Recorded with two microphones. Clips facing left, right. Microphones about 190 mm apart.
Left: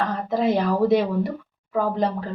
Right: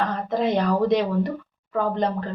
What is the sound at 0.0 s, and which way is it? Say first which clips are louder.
A woman's voice: left 1 dB; 5° left (ahead or behind).